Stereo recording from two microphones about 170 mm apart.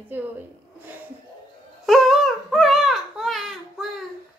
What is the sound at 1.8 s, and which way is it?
Baby cry, centre (ahead or behind).